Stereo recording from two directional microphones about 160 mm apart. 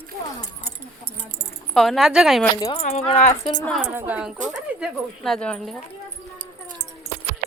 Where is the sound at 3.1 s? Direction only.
45° left (ahead or behind).